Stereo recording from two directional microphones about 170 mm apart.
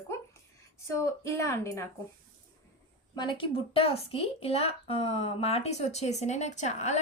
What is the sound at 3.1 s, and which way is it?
A woman's voice, 25° left (ahead or behind).